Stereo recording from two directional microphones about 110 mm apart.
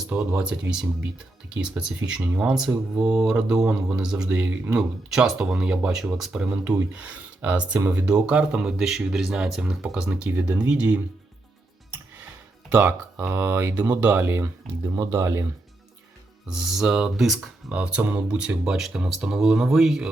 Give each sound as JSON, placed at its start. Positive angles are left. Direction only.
{"t": 0.0, "sound": "speech", "side_deg": -5}
{"t": 12.7, "sound": "speech", "side_deg": -15}
{"t": 16.5, "sound": "speech", "side_deg": -5}